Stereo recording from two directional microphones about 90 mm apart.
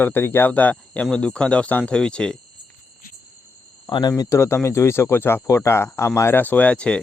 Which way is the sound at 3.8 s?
50° left (ahead or behind).